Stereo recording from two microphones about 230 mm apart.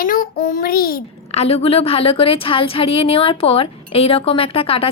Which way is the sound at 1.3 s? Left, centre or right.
Left.